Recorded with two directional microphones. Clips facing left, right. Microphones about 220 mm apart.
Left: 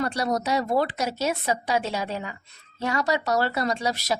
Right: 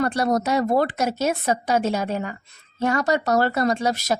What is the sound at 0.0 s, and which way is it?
Speech, 50° right (ahead or behind).